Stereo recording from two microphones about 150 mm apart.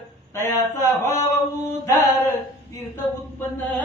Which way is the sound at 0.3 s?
20° left (ahead or behind).